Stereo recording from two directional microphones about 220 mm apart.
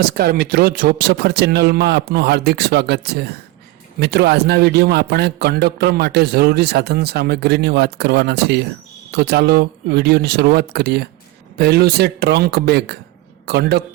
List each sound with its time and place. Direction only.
0.0 s a man's voice: 45° right (ahead or behind)